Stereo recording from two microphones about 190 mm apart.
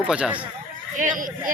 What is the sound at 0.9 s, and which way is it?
Speech, 45° right (ahead or behind).